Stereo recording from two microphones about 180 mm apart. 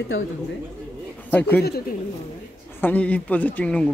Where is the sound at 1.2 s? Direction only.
10° left (ahead or behind).